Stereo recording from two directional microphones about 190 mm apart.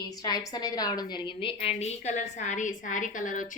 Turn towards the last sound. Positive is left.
turn(degrees=45)  # may be behind; listen again after turning